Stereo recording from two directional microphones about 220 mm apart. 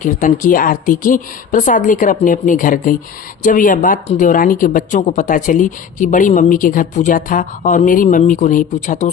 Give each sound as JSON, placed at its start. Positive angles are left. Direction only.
{"t": 0.0, "sound": "speech", "side_deg": 35}